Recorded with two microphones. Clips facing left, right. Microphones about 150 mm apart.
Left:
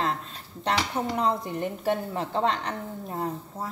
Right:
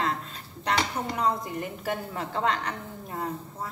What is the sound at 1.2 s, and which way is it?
A woman's voice, 30° left (ahead or behind).